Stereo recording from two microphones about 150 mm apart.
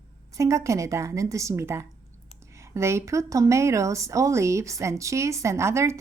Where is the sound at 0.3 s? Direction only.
20° right (ahead or behind).